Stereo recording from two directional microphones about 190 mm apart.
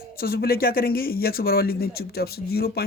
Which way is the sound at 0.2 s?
55° left (ahead or behind).